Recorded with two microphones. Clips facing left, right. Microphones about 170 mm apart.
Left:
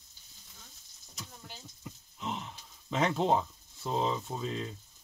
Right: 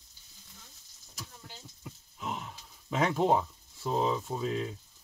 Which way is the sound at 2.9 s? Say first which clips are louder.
Right 1 dB; 5° right (ahead or behind).